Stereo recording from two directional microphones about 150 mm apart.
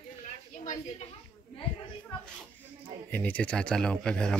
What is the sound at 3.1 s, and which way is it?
Speech, 10° left (ahead or behind).